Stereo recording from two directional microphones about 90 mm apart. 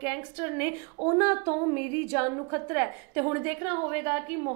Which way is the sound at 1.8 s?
20° right (ahead or behind).